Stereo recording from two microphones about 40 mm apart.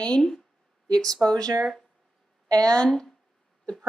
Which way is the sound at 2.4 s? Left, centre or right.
Left.